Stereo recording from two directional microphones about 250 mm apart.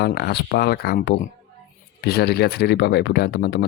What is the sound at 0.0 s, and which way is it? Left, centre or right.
Speech, left.